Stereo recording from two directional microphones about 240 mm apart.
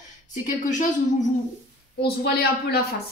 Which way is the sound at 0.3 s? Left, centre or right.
Left.